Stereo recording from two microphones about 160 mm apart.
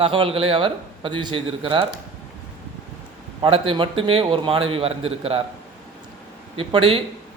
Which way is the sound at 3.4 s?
35° right (ahead or behind).